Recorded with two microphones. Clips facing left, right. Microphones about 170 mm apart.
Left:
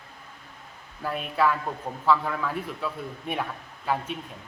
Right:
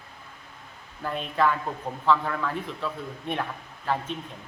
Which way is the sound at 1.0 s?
5° left (ahead or behind).